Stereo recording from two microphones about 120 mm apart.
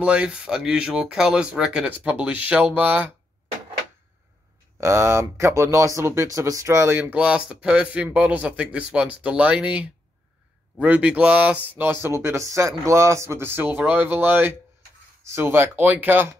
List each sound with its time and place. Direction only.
0.0 s speech: 10° right (ahead or behind)
4.7 s speech: 20° right (ahead or behind)